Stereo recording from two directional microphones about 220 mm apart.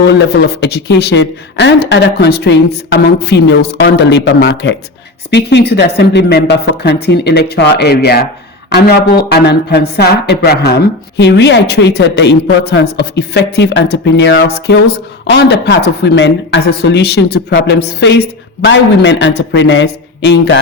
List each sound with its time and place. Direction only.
0.0 s speech: 50° left (ahead or behind)